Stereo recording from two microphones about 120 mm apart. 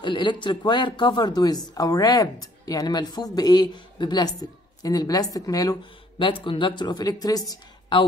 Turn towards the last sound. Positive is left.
turn(degrees=30)  # may be behind; listen again after turning